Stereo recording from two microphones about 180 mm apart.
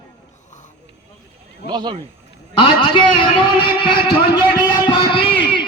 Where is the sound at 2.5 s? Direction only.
25° left (ahead or behind).